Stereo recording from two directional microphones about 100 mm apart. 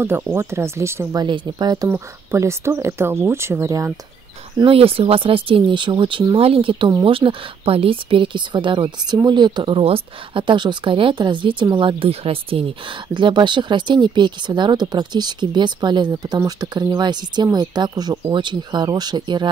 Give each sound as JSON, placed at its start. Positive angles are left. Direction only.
{"t": 0.0, "sound": "speech", "side_deg": -25}
{"t": 1.1, "sound": "speech", "side_deg": -50}
{"t": 1.9, "sound": "speech", "side_deg": -25}
{"t": 4.6, "sound": "speech", "side_deg": -70}
{"t": 6.3, "sound": "speech", "side_deg": -70}
{"t": 13.1, "sound": "speech", "side_deg": -50}